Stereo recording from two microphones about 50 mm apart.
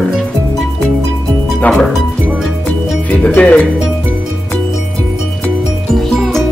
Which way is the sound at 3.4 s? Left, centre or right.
Left.